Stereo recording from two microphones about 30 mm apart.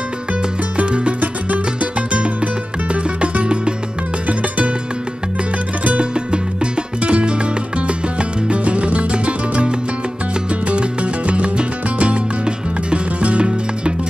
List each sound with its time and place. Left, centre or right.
0.3 s music: right
1.2 s music: right
2.0 s music: right
4.3 s music: right
5.9 s music: right